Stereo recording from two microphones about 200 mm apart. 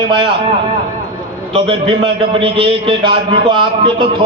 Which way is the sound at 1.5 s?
30° right (ahead or behind).